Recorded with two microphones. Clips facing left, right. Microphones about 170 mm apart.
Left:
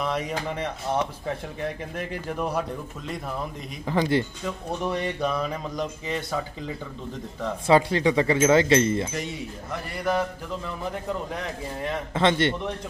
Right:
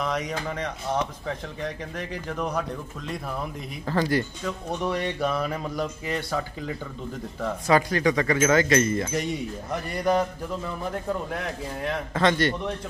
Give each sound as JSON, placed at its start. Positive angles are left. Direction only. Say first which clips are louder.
{"t": 0.0, "sound": "speech", "louder": "left 1 dB", "side_deg": 5}
{"t": 2.0, "sound": "speech", "louder": "left 1 dB", "side_deg": 10}
{"t": 3.9, "sound": "speech", "louder": "left 1 dB", "side_deg": 15}
{"t": 4.8, "sound": "speech", "louder": "even", "side_deg": 0}
{"t": 7.6, "sound": "speech", "louder": "left 2 dB", "side_deg": 25}
{"t": 9.7, "sound": "speech", "louder": "right 3 dB", "side_deg": -20}
{"t": 10.6, "sound": "speech", "louder": "right 1 dB", "side_deg": -5}
{"t": 12.1, "sound": "speech", "louder": "left 1 dB", "side_deg": 25}